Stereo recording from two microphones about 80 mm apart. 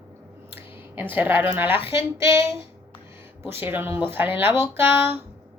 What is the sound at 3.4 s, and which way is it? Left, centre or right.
Speech, right.